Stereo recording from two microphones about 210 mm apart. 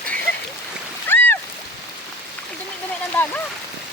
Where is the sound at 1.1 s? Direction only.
10° left (ahead or behind).